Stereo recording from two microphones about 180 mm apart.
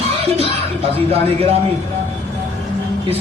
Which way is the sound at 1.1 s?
35° right (ahead or behind).